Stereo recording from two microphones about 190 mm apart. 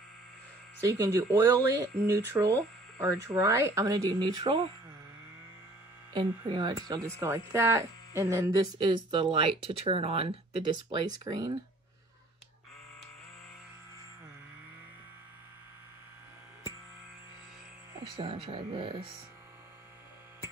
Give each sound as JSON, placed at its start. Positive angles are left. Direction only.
{"t": 0.8, "sound": "speech", "side_deg": -15}
{"t": 6.1, "sound": "speech", "side_deg": -25}
{"t": 8.8, "sound": "speech", "side_deg": -25}
{"t": 18.0, "sound": "speech", "side_deg": -25}